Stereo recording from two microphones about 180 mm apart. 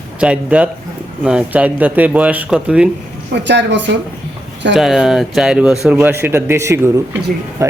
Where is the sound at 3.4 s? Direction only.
75° right (ahead or behind).